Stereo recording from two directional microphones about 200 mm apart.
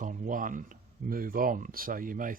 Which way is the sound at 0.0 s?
40° right (ahead or behind).